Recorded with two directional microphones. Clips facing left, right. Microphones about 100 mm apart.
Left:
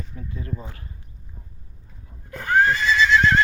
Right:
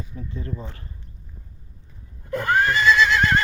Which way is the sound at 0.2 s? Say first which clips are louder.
Right 3 dB; 30° right (ahead or behind).